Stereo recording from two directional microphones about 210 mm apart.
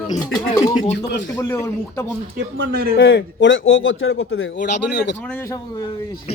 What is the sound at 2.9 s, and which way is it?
A man's voice, 60° left (ahead or behind).